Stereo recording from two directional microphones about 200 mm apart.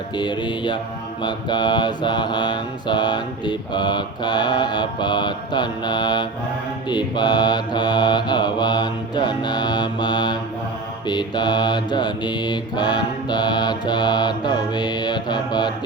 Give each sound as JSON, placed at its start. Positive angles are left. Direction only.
{"t": 0.2, "sound": "mantra", "side_deg": 20}